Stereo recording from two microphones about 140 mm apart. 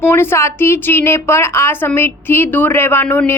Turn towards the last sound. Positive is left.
turn(degrees=15)  # may be behind; listen again after turning